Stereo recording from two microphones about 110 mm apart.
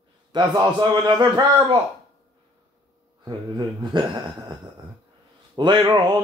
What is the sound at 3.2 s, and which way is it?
Speech, 45° right (ahead or behind).